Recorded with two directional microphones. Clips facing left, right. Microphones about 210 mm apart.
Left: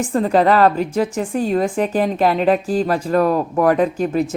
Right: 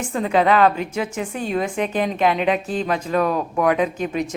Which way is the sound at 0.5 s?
35° left (ahead or behind).